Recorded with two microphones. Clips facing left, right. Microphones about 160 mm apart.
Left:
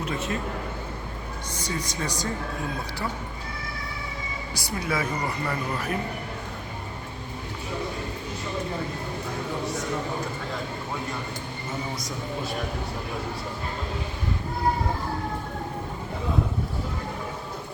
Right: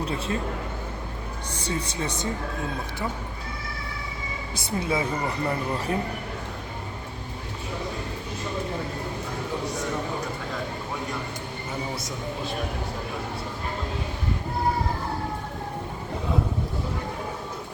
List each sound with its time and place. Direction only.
0.0 s a man's voice: 35° right (ahead or behind)
1.5 s speech: 30° right (ahead or behind)
4.5 s speech: 25° right (ahead or behind)